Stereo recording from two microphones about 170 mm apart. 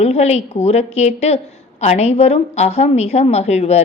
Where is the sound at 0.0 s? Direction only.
40° left (ahead or behind).